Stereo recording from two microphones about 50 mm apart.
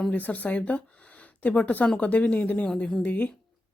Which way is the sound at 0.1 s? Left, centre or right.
Left.